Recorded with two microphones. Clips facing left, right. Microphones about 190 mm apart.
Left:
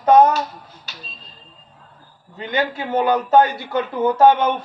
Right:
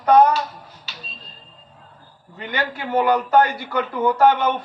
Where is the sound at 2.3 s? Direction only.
25° left (ahead or behind).